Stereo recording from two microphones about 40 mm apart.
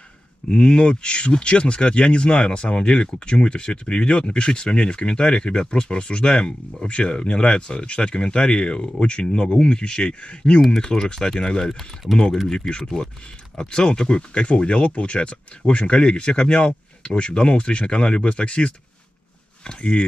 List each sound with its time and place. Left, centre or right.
0.5 s speech: left
11.6 s speech: centre
12.4 s speech: centre